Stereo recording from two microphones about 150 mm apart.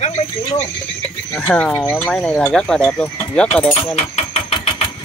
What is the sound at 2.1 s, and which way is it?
Speech, 5° left (ahead or behind).